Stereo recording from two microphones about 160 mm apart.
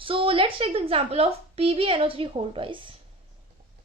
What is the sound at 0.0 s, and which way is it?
A woman's voice, 35° right (ahead or behind).